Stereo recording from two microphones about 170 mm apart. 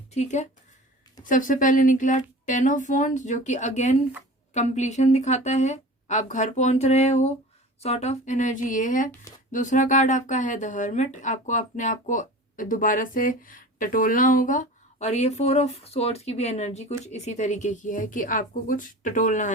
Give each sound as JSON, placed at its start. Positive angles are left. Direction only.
{"t": 0.1, "sound": "speech", "side_deg": 40}